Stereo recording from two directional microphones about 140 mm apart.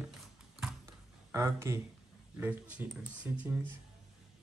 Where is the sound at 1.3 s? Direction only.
20° right (ahead or behind).